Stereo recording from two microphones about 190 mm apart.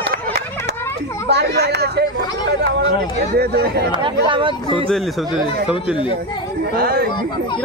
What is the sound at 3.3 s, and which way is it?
Speech, 55° right (ahead or behind).